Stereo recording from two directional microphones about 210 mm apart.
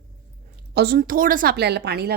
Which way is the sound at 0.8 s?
50° right (ahead or behind).